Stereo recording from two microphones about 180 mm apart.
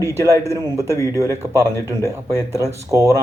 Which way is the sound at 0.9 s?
15° left (ahead or behind).